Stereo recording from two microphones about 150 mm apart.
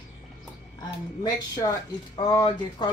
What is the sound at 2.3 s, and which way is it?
Speech, 30° left (ahead or behind).